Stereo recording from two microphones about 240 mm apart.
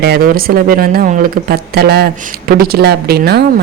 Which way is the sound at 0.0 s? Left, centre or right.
Right.